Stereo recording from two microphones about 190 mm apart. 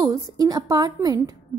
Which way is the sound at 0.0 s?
20° right (ahead or behind).